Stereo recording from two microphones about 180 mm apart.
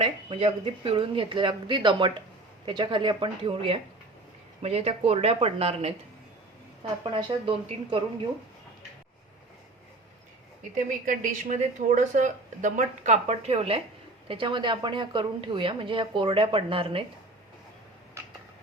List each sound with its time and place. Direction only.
0.0 s speech: 30° right (ahead or behind)
7.0 s speech: 25° right (ahead or behind)
10.8 s speech: 50° right (ahead or behind); by 17.1 s 30° right (ahead or behind)